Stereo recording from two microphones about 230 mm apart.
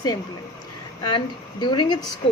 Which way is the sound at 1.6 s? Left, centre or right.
Centre.